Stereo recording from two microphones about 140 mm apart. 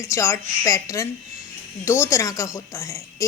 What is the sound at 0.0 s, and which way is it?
A woman's voice, 20° left (ahead or behind).